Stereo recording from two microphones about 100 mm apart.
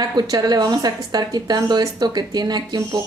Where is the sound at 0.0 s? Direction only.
40° right (ahead or behind).